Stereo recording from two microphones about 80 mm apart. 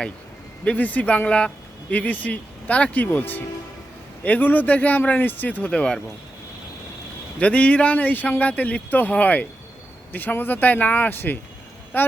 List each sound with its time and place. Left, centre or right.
0.6 s speech: centre
7.3 s speech: centre